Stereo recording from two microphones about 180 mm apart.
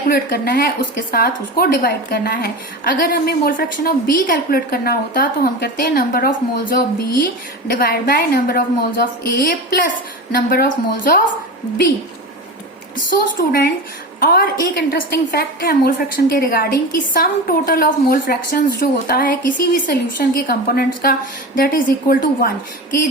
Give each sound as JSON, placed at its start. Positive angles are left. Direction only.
{"t": 0.1, "sound": "a woman's voice", "side_deg": 55}
{"t": 13.1, "sound": "a woman's voice", "side_deg": 50}